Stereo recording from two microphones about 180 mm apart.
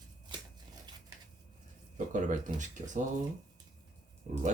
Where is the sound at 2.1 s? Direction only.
45° right (ahead or behind).